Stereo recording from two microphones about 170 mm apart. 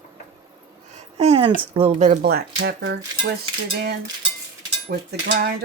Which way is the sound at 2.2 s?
65° right (ahead or behind).